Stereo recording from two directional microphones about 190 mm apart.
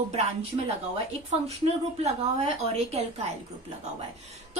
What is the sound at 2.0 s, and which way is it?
Speech, 35° right (ahead or behind).